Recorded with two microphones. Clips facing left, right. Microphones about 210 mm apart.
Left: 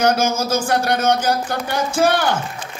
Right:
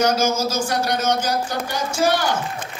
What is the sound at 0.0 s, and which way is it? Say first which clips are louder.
A woman's voice: left 1 dB; 55° left (ahead or behind).